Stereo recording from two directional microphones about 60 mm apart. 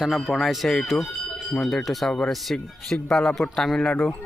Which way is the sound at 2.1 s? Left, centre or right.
Centre.